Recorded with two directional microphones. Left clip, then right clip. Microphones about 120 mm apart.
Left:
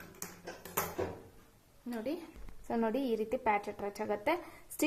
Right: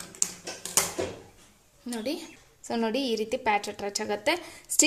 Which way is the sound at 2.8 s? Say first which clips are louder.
Right 5 dB; 10° right (ahead or behind).